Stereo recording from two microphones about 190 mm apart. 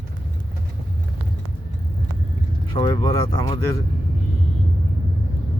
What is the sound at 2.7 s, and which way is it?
Speech, 20° left (ahead or behind).